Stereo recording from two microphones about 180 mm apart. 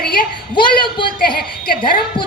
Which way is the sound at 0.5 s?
25° left (ahead or behind).